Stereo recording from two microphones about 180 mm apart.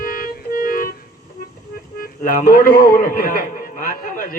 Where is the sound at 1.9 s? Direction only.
55° left (ahead or behind).